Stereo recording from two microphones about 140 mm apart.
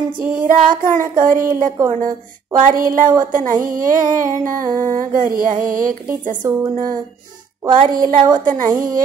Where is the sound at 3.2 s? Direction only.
70° right (ahead or behind).